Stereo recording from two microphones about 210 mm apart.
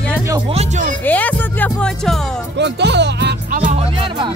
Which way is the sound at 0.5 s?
30° right (ahead or behind).